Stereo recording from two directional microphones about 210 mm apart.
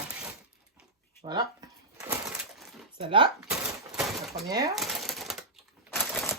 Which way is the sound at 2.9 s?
25° right (ahead or behind).